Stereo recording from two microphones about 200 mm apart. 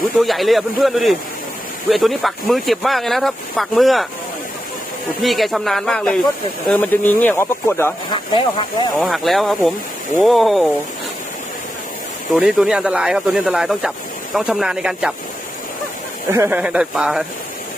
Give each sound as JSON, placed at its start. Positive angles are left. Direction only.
{"t": 0.2, "sound": "speech", "side_deg": 0}
{"t": 5.2, "sound": "speech", "side_deg": 0}
{"t": 8.1, "sound": "speech", "side_deg": 25}
{"t": 9.0, "sound": "speech", "side_deg": 0}
{"t": 12.3, "sound": "speech", "side_deg": 0}
{"t": 16.3, "sound": "speech", "side_deg": -10}